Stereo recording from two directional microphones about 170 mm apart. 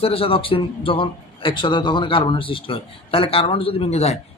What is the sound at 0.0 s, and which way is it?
A man's voice, 35° left (ahead or behind).